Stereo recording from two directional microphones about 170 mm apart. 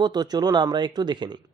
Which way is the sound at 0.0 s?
25° right (ahead or behind).